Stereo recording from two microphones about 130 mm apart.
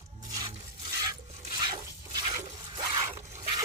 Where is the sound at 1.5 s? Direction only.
35° right (ahead or behind).